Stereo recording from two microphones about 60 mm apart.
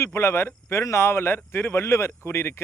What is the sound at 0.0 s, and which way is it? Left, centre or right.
Speech, left.